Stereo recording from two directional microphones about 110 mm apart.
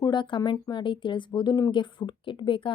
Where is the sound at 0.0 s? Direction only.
45° left (ahead or behind).